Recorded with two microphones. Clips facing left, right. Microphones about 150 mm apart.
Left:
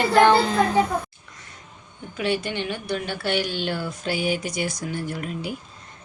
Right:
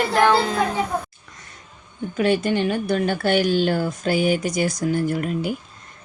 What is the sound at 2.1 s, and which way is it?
Speech, 45° right (ahead or behind).